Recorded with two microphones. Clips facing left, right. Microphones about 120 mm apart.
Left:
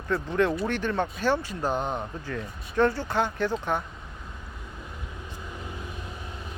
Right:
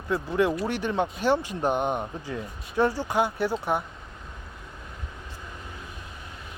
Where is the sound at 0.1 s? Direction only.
10° right (ahead or behind).